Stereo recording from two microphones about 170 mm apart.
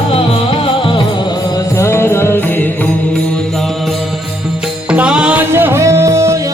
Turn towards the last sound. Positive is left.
turn(degrees=-15)  # may be behind; listen again after turning